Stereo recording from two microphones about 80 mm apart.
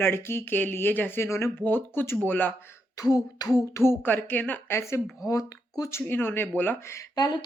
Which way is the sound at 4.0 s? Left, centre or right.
Left.